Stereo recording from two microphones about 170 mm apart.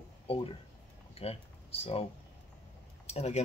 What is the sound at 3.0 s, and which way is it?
Speech, 40° left (ahead or behind).